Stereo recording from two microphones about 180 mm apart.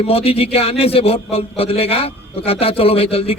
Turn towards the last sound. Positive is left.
turn(degrees=35)  # may be behind; listen again after turning